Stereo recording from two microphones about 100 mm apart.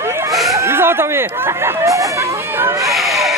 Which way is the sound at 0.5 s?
25° right (ahead or behind).